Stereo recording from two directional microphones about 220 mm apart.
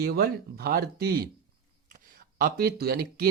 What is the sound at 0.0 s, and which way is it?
Speech, 45° right (ahead or behind).